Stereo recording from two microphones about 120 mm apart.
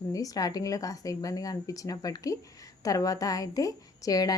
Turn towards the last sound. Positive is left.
turn(degrees=30)  # may be behind; listen again after turning